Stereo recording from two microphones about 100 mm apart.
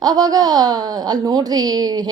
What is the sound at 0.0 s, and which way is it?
A woman's voice, 40° right (ahead or behind).